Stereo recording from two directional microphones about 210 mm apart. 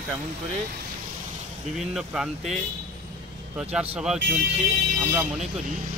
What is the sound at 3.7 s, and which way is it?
Speech, 5° right (ahead or behind).